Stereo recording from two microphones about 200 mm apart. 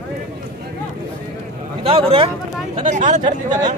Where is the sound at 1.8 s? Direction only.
30° right (ahead or behind).